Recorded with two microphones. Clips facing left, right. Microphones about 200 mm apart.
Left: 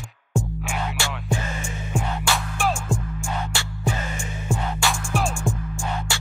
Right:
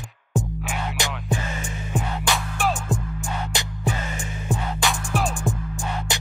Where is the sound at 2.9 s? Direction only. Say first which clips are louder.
Even; 20° right (ahead or behind).